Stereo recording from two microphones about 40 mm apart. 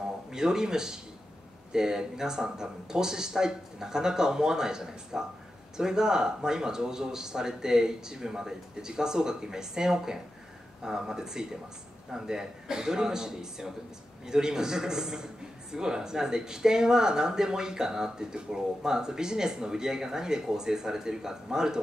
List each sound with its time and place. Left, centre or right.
0.3 s speech: centre